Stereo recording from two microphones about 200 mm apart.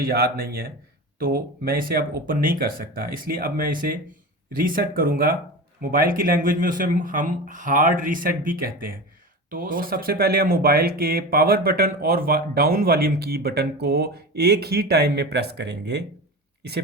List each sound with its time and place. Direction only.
0.0 s speech: 50° right (ahead or behind)